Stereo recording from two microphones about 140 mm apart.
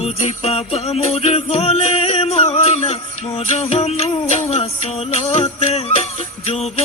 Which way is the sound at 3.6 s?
50° left (ahead or behind).